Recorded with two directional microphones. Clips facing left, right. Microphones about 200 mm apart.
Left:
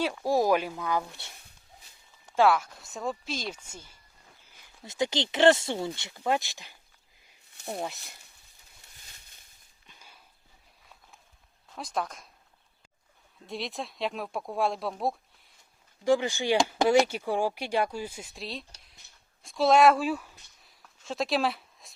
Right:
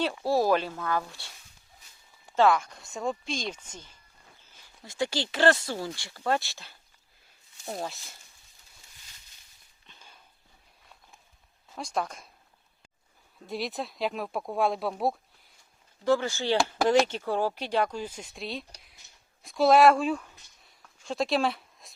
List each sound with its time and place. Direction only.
0.3 s speech: 15° left (ahead or behind)
2.3 s speech: 5° left (ahead or behind)
4.9 s speech: 20° left (ahead or behind)
7.8 s speech: 20° left (ahead or behind)
9.8 s walk: 10° left (ahead or behind)
11.7 s speech: centre (ahead or behind)
13.5 s speech: centre (ahead or behind)
16.0 s speech: 15° left (ahead or behind); by 21.9 s centre (ahead or behind)